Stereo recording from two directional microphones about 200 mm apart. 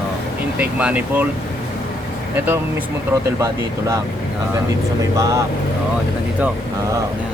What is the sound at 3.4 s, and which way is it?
Speech, 15° right (ahead or behind).